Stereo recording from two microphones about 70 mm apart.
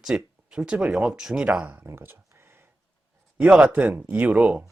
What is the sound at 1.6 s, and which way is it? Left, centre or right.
Speech, right.